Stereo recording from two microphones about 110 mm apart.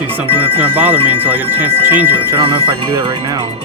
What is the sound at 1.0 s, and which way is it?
Speech, 60° right (ahead or behind).